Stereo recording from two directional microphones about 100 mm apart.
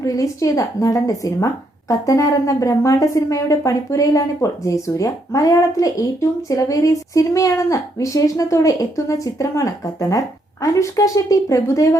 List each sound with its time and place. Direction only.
0.0 s a woman's voice: 35° left (ahead or behind)